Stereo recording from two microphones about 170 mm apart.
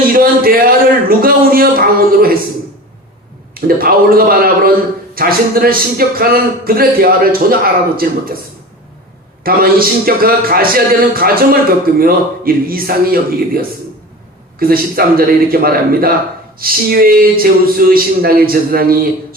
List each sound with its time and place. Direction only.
0.1 s speech: 60° right (ahead or behind)
3.5 s speech: 60° right (ahead or behind)
9.4 s speech: 60° right (ahead or behind)